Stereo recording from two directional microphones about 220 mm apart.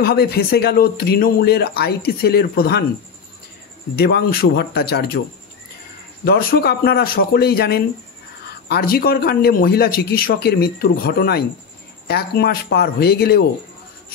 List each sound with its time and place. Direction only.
0.0 s a man's voice: 45° left (ahead or behind)
3.9 s a man's voice: 45° left (ahead or behind)
6.2 s a man's voice: 45° left (ahead or behind)